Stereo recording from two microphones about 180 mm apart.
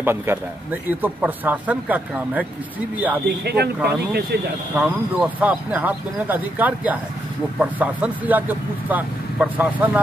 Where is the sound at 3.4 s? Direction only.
60° right (ahead or behind).